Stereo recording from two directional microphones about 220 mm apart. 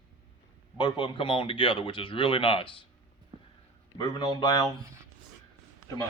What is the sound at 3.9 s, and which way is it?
Speech, 20° left (ahead or behind).